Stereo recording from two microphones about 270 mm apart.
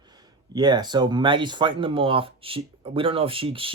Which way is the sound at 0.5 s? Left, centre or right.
Centre.